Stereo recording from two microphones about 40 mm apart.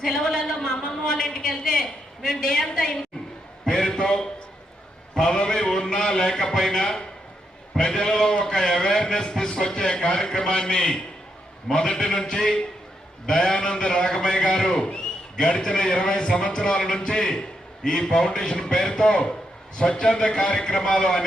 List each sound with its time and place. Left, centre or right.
0.0 s a man's voice: centre
3.7 s a sound: left
5.1 s a man's voice: centre